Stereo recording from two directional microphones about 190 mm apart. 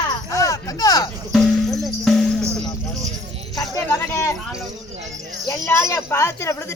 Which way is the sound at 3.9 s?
15° left (ahead or behind).